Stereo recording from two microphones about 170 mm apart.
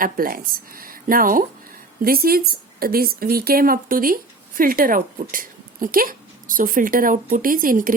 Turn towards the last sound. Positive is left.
turn(degrees=-55)  # may be behind; listen again after turning